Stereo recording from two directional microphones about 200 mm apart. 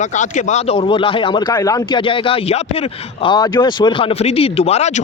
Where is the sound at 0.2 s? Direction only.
35° left (ahead or behind).